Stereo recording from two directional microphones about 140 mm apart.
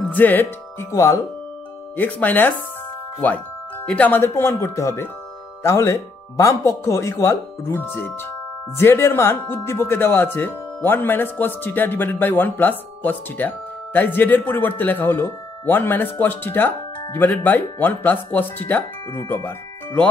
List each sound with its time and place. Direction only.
0.1 s speech: 15° left (ahead or behind)